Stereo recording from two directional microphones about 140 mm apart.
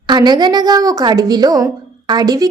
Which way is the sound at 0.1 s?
30° right (ahead or behind).